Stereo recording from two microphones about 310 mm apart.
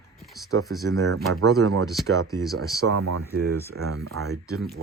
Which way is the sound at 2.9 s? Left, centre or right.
Right.